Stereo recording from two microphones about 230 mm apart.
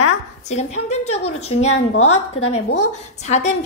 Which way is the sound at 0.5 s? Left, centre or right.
Left.